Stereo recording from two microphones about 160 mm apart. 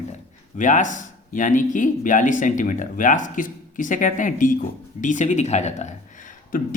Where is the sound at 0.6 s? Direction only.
55° left (ahead or behind).